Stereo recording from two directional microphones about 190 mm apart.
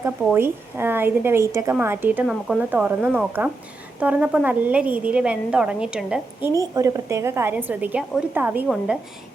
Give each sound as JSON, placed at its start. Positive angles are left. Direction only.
{"t": 0.0, "sound": "a woman's voice", "side_deg": -10}
{"t": 6.6, "sound": "a woman's voice", "side_deg": -20}